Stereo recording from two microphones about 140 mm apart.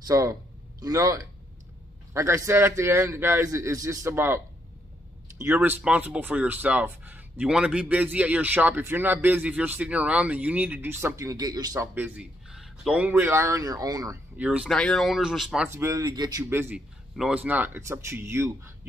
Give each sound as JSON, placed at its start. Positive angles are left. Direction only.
{"t": 0.0, "sound": "a man's voice", "side_deg": -25}
{"t": 5.4, "sound": "speech", "side_deg": -15}
{"t": 11.9, "sound": "a man's voice", "side_deg": -15}
{"t": 14.3, "sound": "speech", "side_deg": -10}
{"t": 14.7, "sound": "speech", "side_deg": 5}
{"t": 15.7, "sound": "a man's voice", "side_deg": -20}
{"t": 16.4, "sound": "speech", "side_deg": -15}